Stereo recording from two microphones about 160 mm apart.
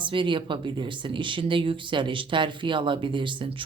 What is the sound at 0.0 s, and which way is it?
Speech, 30° right (ahead or behind).